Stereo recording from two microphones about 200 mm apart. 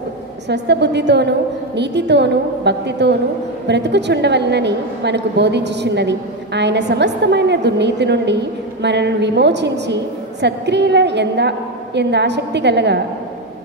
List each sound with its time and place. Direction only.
0.5 s a woman's voice: 60° right (ahead or behind)